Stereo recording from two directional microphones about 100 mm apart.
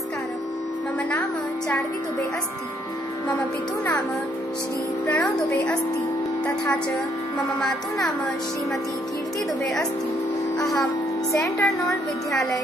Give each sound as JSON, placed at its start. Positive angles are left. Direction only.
{"t": 5.1, "sound": "speech", "side_deg": 5}
{"t": 10.6, "sound": "speech", "side_deg": 0}
{"t": 11.3, "sound": "a woman's voice", "side_deg": 30}